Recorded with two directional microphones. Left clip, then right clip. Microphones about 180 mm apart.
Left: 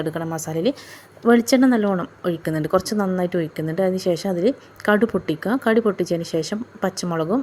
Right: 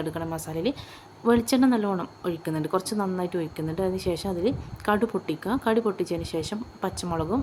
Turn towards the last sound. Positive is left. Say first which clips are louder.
# left 5 dB
turn(degrees=25)  # may be behind; listen again after turning